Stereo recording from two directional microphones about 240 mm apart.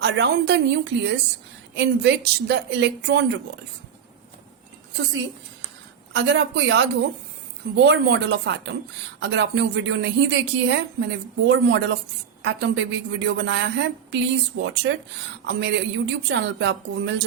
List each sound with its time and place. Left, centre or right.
0.0 s a woman's voice: right
6.1 s a woman's voice: right